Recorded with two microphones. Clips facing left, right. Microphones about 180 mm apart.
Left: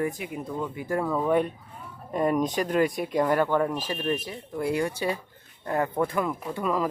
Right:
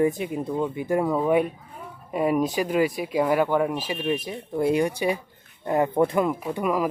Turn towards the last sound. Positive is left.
turn(degrees=-10)  # may be behind; listen again after turning